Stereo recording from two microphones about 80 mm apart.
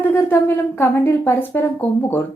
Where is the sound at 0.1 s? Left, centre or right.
Left.